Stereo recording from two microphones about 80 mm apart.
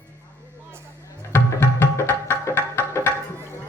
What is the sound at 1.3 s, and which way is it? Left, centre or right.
Music, left.